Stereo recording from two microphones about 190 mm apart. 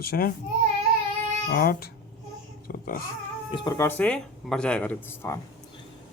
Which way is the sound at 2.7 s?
50° left (ahead or behind).